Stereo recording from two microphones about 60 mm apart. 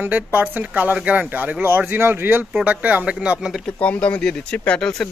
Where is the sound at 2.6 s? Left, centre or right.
Right.